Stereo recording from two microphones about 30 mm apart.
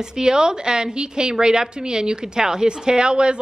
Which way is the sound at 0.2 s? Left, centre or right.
Right.